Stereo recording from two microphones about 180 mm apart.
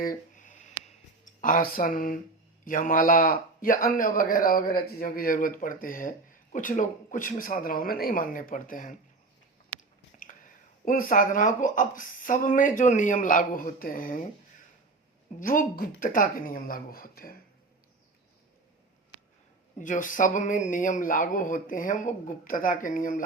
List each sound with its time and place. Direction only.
0.0 s a sound: 50° left (ahead or behind)
2.6 s a man's voice: 50° left (ahead or behind)
10.8 s a man's voice: 45° left (ahead or behind)
15.4 s a man's voice: 50° left (ahead or behind)
19.8 s a man's voice: 45° left (ahead or behind)